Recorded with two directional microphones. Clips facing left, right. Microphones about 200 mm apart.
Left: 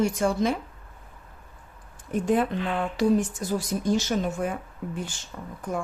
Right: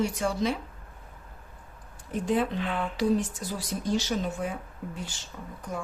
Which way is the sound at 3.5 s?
50° left (ahead or behind).